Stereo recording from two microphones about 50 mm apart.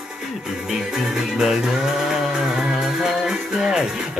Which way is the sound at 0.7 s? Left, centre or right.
Centre.